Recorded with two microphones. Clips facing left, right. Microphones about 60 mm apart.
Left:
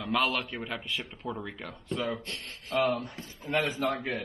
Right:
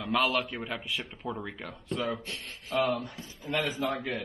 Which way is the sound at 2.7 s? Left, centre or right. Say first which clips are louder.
Left 1 dB; left.